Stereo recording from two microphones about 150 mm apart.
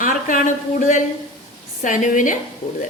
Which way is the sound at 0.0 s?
60° left (ahead or behind).